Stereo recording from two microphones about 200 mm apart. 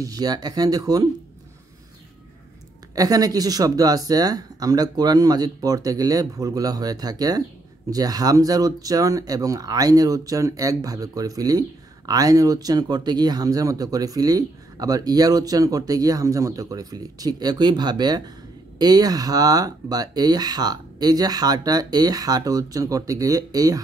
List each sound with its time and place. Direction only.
0.0 s speech: 20° right (ahead or behind)
2.9 s speech: 20° right (ahead or behind)